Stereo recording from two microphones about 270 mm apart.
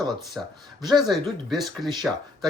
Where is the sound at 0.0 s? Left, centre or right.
Centre.